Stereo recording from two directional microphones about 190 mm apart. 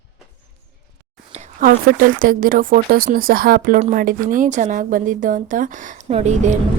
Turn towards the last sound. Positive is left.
turn(degrees=-40)  # may be behind; listen again after turning